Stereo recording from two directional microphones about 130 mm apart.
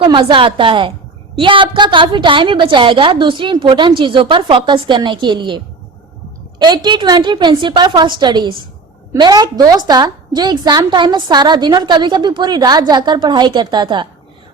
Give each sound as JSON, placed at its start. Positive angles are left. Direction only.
{"t": 0.0, "sound": "a woman's voice", "side_deg": -40}